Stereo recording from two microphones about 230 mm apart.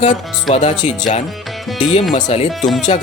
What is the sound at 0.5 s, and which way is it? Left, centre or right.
Speech, left.